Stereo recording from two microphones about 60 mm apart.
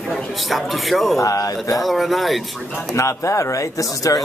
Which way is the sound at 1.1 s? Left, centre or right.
Left.